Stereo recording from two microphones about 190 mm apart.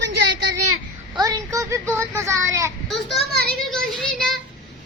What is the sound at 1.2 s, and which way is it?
A child's voice, 20° right (ahead or behind).